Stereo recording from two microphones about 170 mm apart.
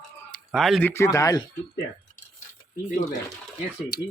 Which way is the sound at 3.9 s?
70° left (ahead or behind).